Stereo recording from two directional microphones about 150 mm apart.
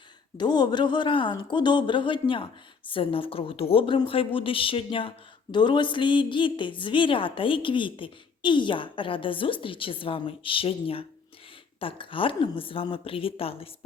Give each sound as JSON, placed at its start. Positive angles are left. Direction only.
{"t": 0.3, "sound": "speech", "side_deg": 30}